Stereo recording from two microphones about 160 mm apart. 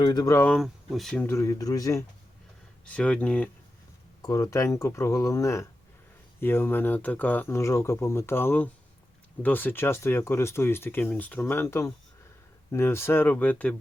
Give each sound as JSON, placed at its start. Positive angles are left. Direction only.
{"t": 0.0, "sound": "speech", "side_deg": 25}
{"t": 0.4, "sound": "speech", "side_deg": 0}
{"t": 1.2, "sound": "speech", "side_deg": 15}
{"t": 2.8, "sound": "speech", "side_deg": 5}
{"t": 4.2, "sound": "speech", "side_deg": 20}